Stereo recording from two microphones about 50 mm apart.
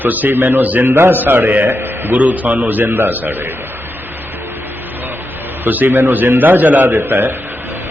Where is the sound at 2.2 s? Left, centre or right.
Right.